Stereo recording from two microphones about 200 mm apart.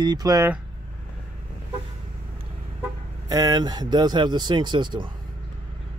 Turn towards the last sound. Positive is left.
turn(degrees=-25)  # may be behind; listen again after turning